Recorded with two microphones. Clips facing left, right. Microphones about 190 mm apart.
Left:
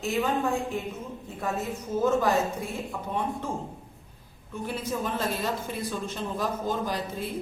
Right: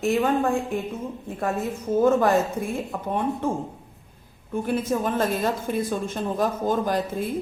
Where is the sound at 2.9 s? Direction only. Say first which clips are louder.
Right 5 dB; 50° right (ahead or behind).